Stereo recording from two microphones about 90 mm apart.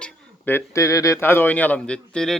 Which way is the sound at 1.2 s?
25° left (ahead or behind).